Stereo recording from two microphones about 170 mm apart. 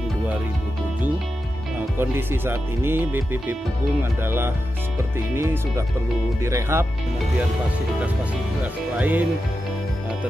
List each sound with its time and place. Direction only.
2.0 s speech: 15° right (ahead or behind)
8.9 s speech: 10° right (ahead or behind)